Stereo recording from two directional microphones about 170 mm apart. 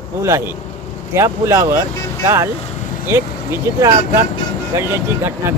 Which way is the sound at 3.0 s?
15° right (ahead or behind).